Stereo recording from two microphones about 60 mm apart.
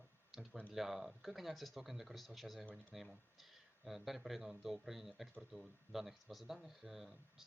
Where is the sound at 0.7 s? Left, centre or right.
Centre.